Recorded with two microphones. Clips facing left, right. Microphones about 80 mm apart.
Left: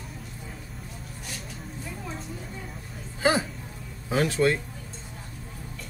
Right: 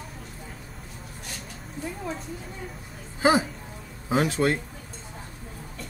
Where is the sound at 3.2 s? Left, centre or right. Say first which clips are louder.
Right 3 dB; centre.